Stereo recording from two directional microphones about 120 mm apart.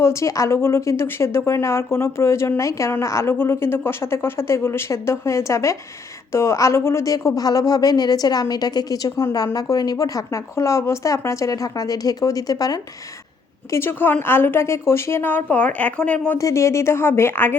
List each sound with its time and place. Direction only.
0.0 s speech: 25° left (ahead or behind)
13.7 s a woman's voice: 20° left (ahead or behind)
16.4 s speech: 25° left (ahead or behind)